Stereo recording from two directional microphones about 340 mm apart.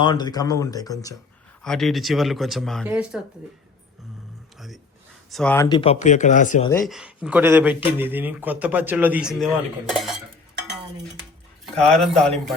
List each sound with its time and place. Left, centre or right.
0.0 s speech: centre
5.3 s speech: centre; by 6.7 s left
6.8 s speech: centre
11.8 s speech: centre